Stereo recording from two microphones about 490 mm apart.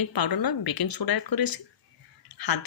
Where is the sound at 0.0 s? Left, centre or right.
Left.